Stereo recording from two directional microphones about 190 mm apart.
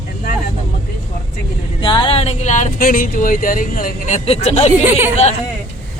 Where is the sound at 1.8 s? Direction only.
25° left (ahead or behind).